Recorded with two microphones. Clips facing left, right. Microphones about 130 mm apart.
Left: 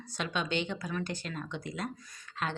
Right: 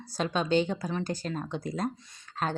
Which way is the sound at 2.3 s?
40° right (ahead or behind).